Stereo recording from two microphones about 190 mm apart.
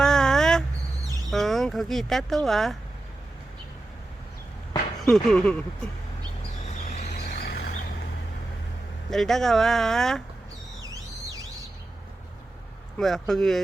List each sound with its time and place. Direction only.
0.0 s a sound: 5° left (ahead or behind)
1.3 s speech: centre (ahead or behind)
4.9 s a sound: centre (ahead or behind)
6.8 s vehicle: 40° left (ahead or behind)
7.4 s vehicle: 55° left (ahead or behind)
9.0 s speech: centre (ahead or behind)
10.8 s vehicle: 20° right (ahead or behind)
13.0 s speech: centre (ahead or behind)